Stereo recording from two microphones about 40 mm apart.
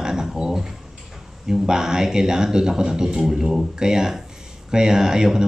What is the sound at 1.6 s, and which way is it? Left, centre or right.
Speech, centre.